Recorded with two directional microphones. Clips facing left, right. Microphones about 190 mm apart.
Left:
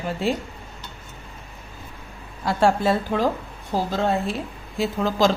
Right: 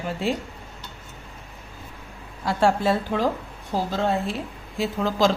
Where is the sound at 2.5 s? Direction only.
45° left (ahead or behind).